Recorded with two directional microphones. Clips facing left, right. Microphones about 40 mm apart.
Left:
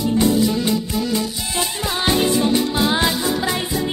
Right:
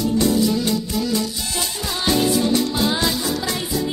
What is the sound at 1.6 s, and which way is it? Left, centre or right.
Music, left.